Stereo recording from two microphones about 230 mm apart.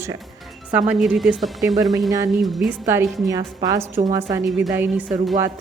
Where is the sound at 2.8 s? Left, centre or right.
Centre.